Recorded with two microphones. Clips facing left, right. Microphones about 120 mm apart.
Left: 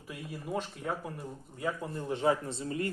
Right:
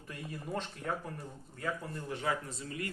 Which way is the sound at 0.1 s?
5° left (ahead or behind).